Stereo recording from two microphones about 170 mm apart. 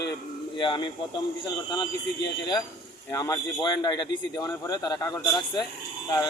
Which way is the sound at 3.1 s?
20° left (ahead or behind).